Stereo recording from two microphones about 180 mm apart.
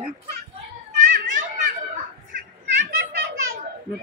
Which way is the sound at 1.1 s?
45° right (ahead or behind).